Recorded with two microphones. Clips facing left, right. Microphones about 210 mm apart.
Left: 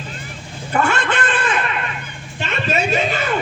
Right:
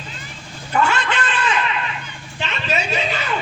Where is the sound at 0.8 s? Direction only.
50° left (ahead or behind).